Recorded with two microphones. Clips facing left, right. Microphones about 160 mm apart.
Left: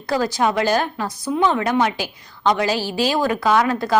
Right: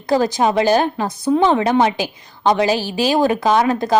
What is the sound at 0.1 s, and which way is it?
A woman's voice, 20° right (ahead or behind).